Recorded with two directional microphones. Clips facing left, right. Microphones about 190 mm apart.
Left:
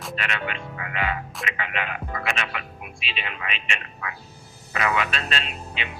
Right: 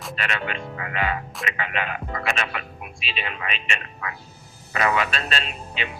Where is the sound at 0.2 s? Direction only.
40° right (ahead or behind).